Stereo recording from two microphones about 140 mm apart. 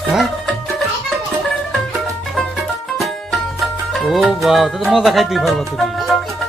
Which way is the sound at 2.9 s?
Centre (ahead or behind).